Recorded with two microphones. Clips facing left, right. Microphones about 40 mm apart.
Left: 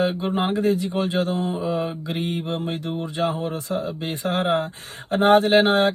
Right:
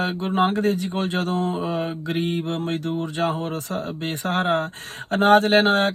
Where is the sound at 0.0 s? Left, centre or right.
Right.